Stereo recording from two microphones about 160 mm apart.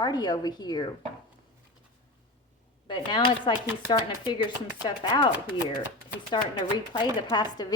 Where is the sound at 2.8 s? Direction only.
30° left (ahead or behind).